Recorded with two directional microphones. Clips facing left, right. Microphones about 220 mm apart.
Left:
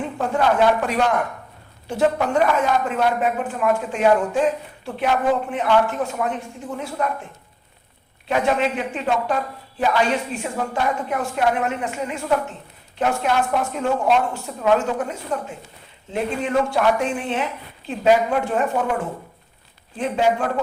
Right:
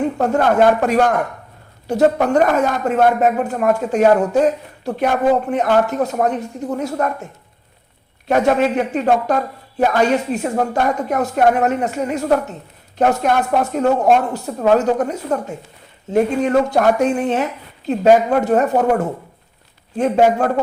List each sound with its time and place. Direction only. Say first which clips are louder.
0.0 s a woman's voice: right 5 dB; 45° right (ahead or behind)
8.3 s a woman's voice: right 5 dB; 45° right (ahead or behind)